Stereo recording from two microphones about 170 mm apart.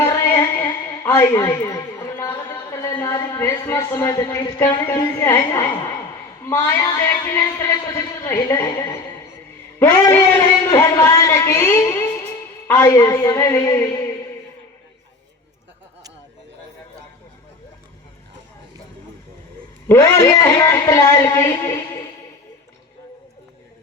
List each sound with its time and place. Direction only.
0.0 s a sound: 15° left (ahead or behind)
6.4 s a man's voice: 15° left (ahead or behind)
7.9 s a man's voice: 15° left (ahead or behind)
19.9 s a man's voice: 15° left (ahead or behind)